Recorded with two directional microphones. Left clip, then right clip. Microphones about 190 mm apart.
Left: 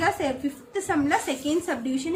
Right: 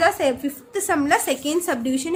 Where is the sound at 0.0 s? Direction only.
55° right (ahead or behind).